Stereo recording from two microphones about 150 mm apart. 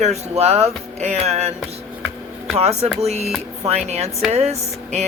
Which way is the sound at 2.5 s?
45° right (ahead or behind).